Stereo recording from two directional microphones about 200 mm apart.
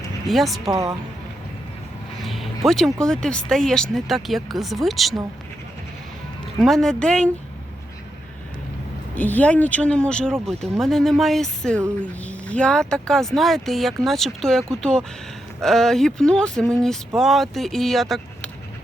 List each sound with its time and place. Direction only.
0.3 s speech: centre (ahead or behind)
0.7 s speech: 15° right (ahead or behind)
2.2 s speech: centre (ahead or behind)
6.6 s speech: centre (ahead or behind)
9.1 s speech: 10° left (ahead or behind)